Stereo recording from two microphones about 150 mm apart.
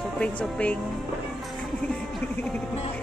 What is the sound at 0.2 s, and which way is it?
Speech, 10° left (ahead or behind).